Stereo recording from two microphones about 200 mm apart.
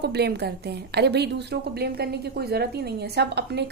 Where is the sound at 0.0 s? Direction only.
55° right (ahead or behind).